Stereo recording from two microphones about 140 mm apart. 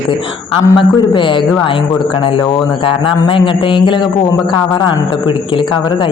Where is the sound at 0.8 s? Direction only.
35° left (ahead or behind).